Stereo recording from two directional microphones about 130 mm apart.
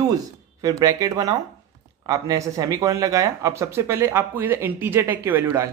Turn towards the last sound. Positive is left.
turn(degrees=-20)  # may be behind; listen again after turning